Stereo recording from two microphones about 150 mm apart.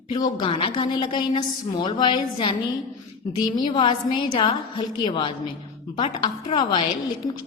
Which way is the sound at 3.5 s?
30° left (ahead or behind).